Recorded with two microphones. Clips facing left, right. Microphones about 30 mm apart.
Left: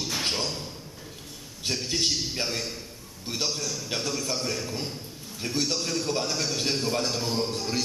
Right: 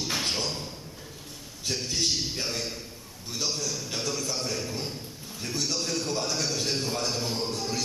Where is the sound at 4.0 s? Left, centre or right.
Centre.